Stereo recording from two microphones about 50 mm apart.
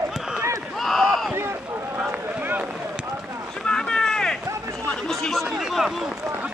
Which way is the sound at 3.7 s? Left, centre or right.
Centre.